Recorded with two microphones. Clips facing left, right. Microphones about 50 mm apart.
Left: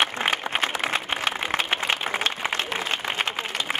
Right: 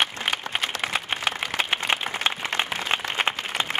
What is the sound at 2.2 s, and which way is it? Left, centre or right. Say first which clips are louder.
Applause: right 1 dB; centre.